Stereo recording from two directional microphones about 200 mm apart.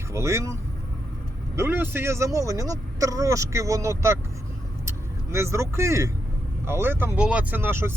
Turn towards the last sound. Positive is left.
turn(degrees=-10)  # may be behind; listen again after turning